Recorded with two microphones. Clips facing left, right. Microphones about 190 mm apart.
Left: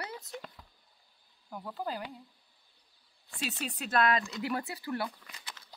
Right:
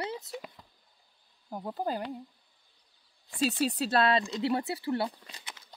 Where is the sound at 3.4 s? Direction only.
35° right (ahead or behind).